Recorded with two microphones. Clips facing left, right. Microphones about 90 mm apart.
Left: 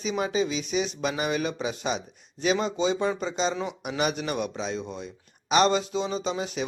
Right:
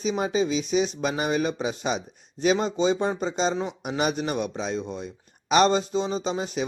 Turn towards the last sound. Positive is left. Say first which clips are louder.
# right 2 dB
turn(degrees=-40)  # may be behind; listen again after turning